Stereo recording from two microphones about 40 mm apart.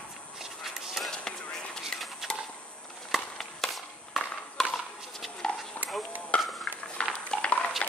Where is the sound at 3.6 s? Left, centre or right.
Centre.